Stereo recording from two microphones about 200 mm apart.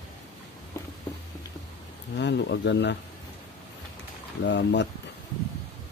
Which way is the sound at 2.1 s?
60° left (ahead or behind).